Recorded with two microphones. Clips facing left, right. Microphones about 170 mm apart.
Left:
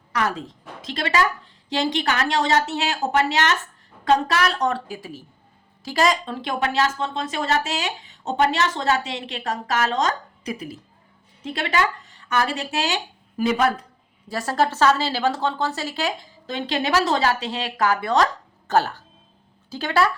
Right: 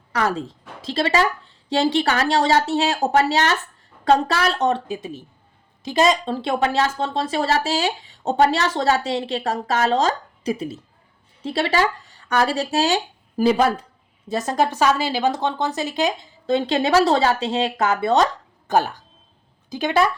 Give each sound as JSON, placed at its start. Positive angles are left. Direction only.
{"t": 0.1, "sound": "a woman's voice", "side_deg": -30}
{"t": 16.5, "sound": "speech", "side_deg": -30}